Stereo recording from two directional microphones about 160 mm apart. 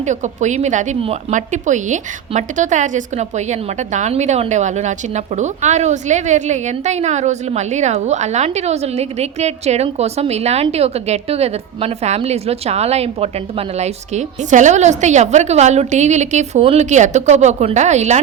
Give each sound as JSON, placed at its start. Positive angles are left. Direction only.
{"t": 0.0, "sound": "a woman's voice", "side_deg": -50}